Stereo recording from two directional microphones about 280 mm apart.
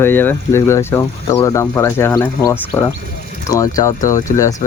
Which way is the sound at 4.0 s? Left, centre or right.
Left.